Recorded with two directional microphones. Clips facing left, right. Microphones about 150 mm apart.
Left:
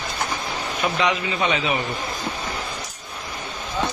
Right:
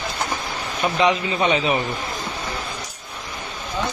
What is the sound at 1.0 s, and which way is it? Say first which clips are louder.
Speech: right 5 dB; 35° right (ahead or behind).